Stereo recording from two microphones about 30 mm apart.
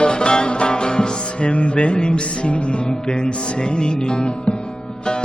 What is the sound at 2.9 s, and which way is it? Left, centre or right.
Music, left.